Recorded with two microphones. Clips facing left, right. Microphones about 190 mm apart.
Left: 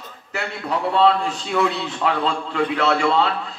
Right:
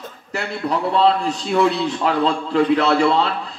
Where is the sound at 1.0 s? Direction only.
35° right (ahead or behind).